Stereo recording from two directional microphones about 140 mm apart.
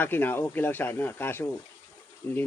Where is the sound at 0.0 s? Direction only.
15° left (ahead or behind).